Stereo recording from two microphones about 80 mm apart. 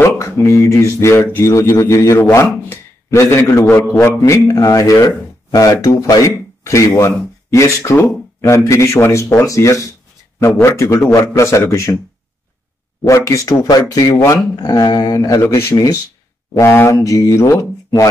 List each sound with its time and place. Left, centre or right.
0.0 s speech: left
1.5 s speech: left
3.2 s speech: left
6.2 s speech: left
13.0 s speech: left
15.7 s speech: left